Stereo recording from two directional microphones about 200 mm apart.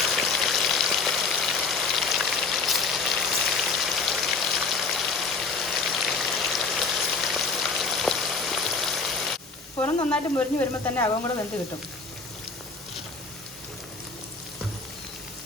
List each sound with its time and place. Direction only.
0.0 s frying: centre (ahead or behind)
7.3 s raindrop: centre (ahead or behind)
9.8 s speech: 10° left (ahead or behind)